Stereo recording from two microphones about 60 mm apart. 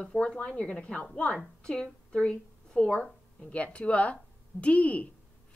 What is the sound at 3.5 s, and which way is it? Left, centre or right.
Speech, left.